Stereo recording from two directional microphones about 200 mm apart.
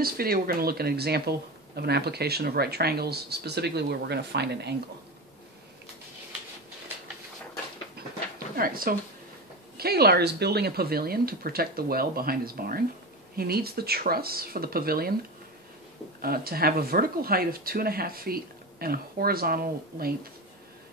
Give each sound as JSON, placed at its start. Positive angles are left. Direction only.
{"t": 0.0, "sound": "speech", "side_deg": -50}
{"t": 8.5, "sound": "speech", "side_deg": -45}
{"t": 16.2, "sound": "speech", "side_deg": -50}